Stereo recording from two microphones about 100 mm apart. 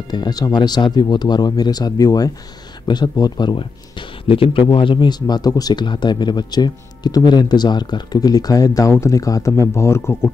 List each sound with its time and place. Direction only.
0.1 s speech: 45° left (ahead or behind)
4.3 s speech: 60° left (ahead or behind); by 10.3 s 25° left (ahead or behind)